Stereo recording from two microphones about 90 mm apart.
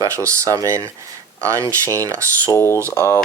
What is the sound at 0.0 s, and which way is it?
Speech, 35° right (ahead or behind).